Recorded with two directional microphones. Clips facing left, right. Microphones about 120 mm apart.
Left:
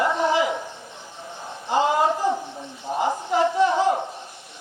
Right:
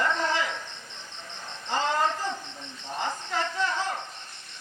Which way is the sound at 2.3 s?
40° left (ahead or behind).